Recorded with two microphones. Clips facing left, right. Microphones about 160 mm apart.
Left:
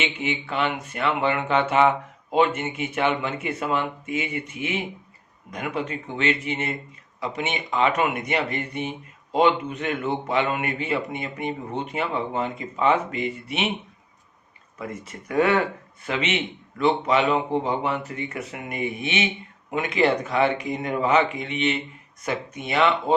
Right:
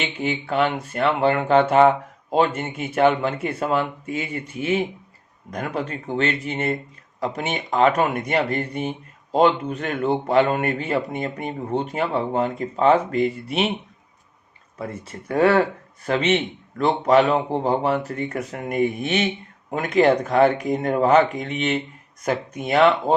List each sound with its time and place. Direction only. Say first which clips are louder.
0.0 s speech: right 2 dB; 35° right (ahead or behind)
14.8 s speech: right 2 dB; 30° right (ahead or behind)